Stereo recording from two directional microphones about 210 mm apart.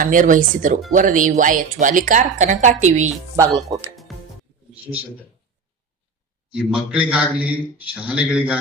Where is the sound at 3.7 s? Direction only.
20° right (ahead or behind).